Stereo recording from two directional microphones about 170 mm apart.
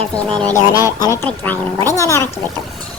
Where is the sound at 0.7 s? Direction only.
20° left (ahead or behind).